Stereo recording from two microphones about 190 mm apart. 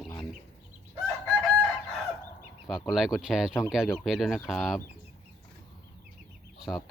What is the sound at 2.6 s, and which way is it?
Speech, centre (ahead or behind).